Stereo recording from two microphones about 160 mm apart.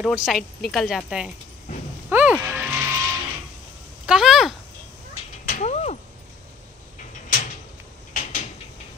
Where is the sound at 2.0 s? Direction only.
10° right (ahead or behind).